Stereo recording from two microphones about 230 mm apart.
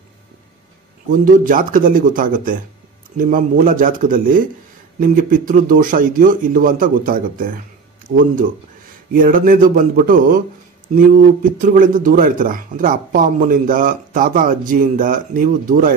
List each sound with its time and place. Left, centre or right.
1.1 s speech: right